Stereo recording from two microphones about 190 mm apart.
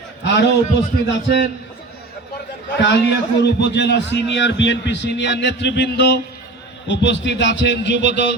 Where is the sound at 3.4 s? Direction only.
65° left (ahead or behind).